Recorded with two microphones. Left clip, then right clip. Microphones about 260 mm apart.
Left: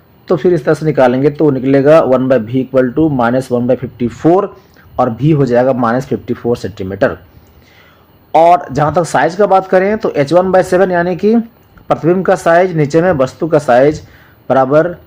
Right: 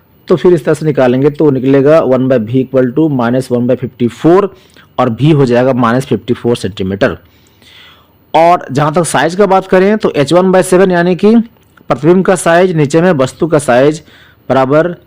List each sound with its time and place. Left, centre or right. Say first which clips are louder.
0.3 s speech: right 3 dB; right
8.3 s speech: even; right